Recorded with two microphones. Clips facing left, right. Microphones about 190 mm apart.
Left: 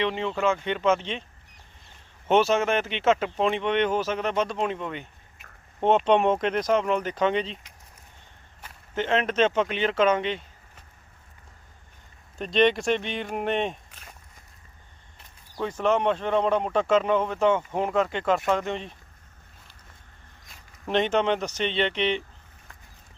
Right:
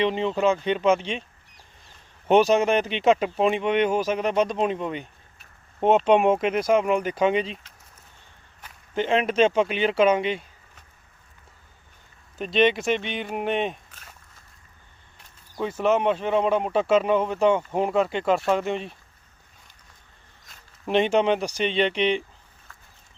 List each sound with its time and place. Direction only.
0.0 s speech: 20° right (ahead or behind)
2.2 s speech: 15° right (ahead or behind)
6.1 s speech: 10° right (ahead or behind)
9.0 s speech: 10° right (ahead or behind)
12.4 s speech: 5° right (ahead or behind)
15.6 s speech: 5° right (ahead or behind)
20.8 s speech: 10° right (ahead or behind)